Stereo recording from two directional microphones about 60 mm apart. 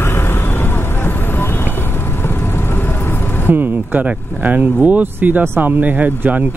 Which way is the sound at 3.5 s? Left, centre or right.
Right.